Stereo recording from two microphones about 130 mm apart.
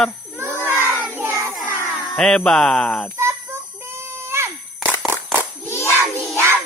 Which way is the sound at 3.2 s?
20° right (ahead or behind).